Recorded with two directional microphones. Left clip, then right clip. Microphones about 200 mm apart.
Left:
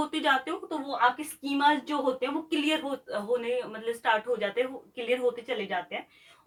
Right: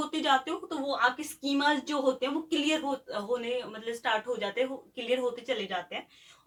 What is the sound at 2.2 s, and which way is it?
Speech, 15° left (ahead or behind).